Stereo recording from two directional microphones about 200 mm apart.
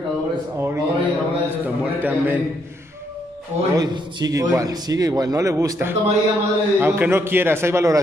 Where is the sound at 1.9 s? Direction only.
10° right (ahead or behind).